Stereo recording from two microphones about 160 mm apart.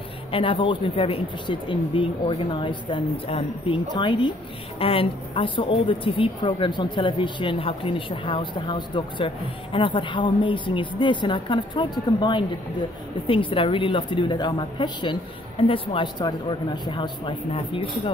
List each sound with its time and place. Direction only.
0.3 s a woman's voice: 35° left (ahead or behind)